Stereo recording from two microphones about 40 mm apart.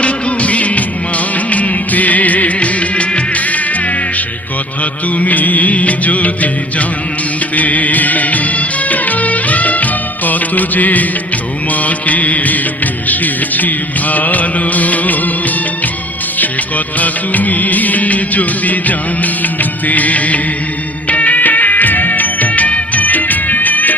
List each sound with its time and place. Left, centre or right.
0.0 s music of bollywood: left
4.8 s music: left
7.5 s music of bollywood: left
16.4 s music: left